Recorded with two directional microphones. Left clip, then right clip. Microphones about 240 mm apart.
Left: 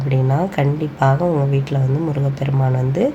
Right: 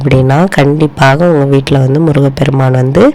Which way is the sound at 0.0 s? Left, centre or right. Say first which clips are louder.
Right 11 dB; right.